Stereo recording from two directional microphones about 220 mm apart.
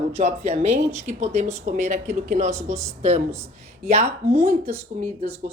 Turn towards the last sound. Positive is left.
turn(degrees=-30)  # may be behind; listen again after turning